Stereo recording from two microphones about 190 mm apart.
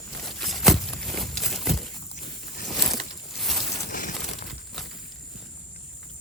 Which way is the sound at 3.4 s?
Centre (ahead or behind).